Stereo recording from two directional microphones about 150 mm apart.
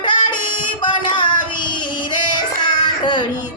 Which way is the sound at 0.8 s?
30° left (ahead or behind).